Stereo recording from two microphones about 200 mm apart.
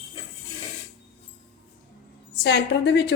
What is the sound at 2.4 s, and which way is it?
Speech, 60° left (ahead or behind).